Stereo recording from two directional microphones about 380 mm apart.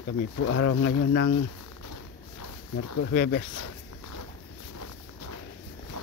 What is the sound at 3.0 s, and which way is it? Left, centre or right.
Speech, left.